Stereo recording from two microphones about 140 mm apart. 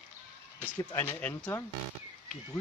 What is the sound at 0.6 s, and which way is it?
Speech, 15° left (ahead or behind).